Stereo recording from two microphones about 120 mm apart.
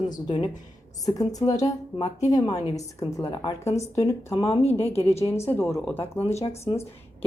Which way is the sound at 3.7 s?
65° left (ahead or behind).